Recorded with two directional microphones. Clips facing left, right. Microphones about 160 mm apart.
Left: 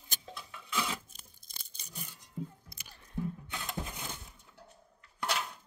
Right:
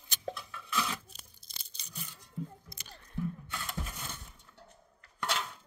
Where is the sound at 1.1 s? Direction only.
50° left (ahead or behind).